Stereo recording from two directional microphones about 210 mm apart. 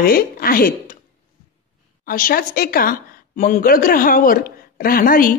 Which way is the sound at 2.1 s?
45° left (ahead or behind).